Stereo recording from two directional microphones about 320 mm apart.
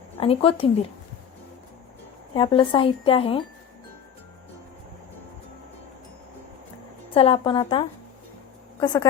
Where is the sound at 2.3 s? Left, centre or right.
Centre.